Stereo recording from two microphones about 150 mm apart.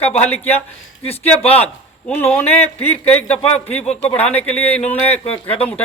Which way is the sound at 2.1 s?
10° left (ahead or behind).